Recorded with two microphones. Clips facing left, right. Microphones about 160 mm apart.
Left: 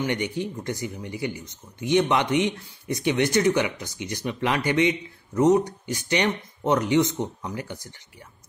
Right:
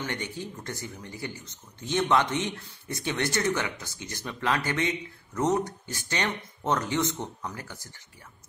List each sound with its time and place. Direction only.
0.0 s speech: 15° left (ahead or behind)